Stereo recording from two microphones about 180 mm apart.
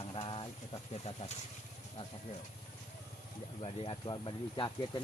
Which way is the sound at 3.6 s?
30° left (ahead or behind).